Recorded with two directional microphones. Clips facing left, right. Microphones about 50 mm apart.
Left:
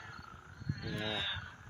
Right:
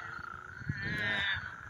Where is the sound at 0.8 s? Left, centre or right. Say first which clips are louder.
Right 6 dB; right.